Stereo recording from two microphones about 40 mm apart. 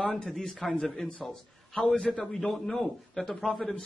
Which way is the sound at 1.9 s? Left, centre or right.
Centre.